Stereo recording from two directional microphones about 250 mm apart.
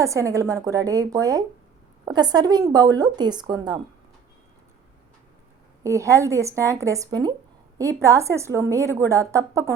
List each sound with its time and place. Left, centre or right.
0.0 s a woman's voice: centre
5.8 s a woman's voice: centre